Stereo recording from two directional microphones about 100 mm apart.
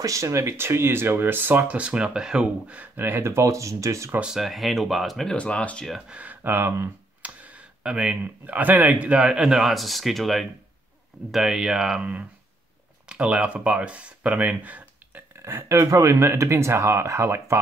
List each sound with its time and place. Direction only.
0.0 s speech: 30° right (ahead or behind)
4.1 s speech: 10° right (ahead or behind); by 5.9 s 10° left (ahead or behind)
5.9 s speech: centre (ahead or behind)
6.1 s speech: 20° right (ahead or behind)
15.3 s speech: 25° right (ahead or behind)